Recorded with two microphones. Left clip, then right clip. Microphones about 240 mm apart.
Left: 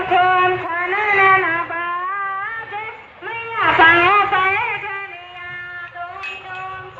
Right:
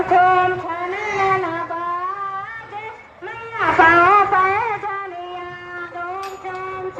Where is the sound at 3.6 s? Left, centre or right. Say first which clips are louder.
Left 1 dB; centre.